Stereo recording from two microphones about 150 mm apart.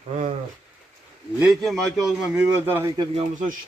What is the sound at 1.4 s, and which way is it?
A man's voice, centre (ahead or behind).